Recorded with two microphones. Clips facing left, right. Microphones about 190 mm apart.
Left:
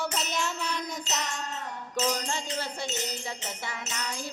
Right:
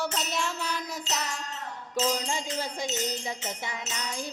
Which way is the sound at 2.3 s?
15° right (ahead or behind).